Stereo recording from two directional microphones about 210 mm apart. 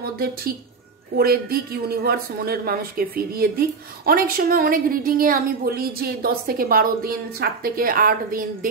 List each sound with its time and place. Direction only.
0.0 s speech: 45° right (ahead or behind)